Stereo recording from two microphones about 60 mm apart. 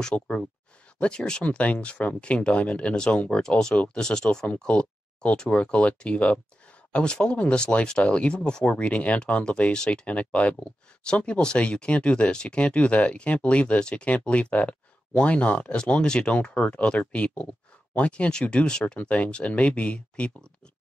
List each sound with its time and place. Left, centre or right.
0.0 s speech: centre